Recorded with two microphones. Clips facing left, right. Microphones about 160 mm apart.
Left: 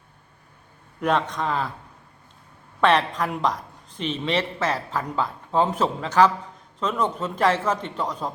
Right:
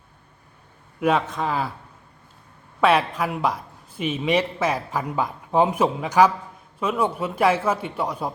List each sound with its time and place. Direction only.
0.9 s speech: 5° right (ahead or behind)
2.8 s a man's voice: 10° right (ahead or behind)